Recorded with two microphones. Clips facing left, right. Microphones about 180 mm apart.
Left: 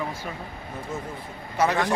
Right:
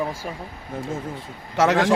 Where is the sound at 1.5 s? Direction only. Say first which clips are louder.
Right 5 dB; 90° right.